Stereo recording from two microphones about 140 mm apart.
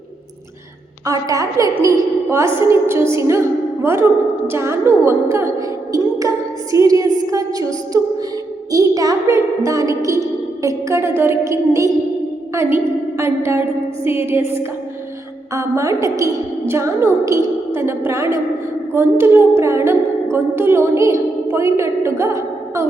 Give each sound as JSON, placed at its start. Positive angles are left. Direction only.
{"t": 1.0, "sound": "a woman's voice", "side_deg": -25}
{"t": 15.5, "sound": "a woman's voice", "side_deg": -20}